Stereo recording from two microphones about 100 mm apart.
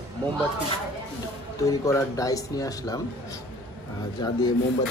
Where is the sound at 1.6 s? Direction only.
35° left (ahead or behind).